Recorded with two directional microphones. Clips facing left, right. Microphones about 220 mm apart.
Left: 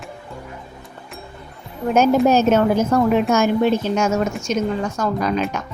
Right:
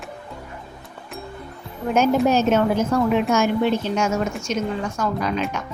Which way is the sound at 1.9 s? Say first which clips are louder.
Left 3 dB; 40° left (ahead or behind).